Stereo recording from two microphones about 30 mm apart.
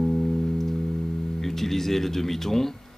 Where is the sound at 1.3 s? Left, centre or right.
Centre.